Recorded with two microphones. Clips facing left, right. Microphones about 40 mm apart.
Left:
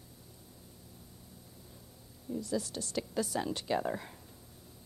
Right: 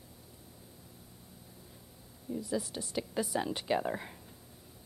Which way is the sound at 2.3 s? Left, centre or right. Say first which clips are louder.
Even; centre.